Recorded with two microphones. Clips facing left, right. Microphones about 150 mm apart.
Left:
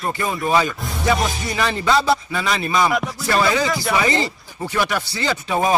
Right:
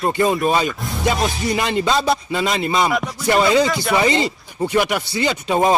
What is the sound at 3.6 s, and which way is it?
Speech, centre (ahead or behind).